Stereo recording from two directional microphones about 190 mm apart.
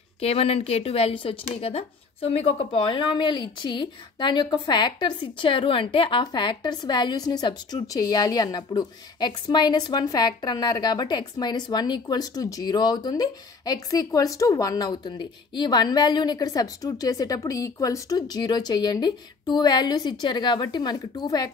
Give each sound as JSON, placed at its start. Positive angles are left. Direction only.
{"t": 0.2, "sound": "speech", "side_deg": 30}